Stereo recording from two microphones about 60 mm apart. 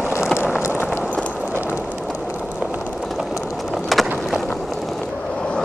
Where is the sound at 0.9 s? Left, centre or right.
Right.